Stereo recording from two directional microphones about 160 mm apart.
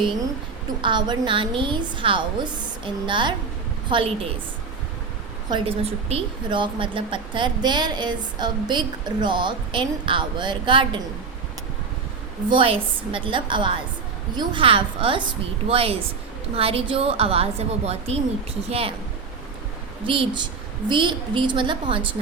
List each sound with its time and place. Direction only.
0.8 s a woman's voice: 30° right (ahead or behind)
5.5 s a woman's voice: 35° right (ahead or behind)
12.5 s a woman's voice: 35° right (ahead or behind)
20.1 s a woman's voice: 30° right (ahead or behind)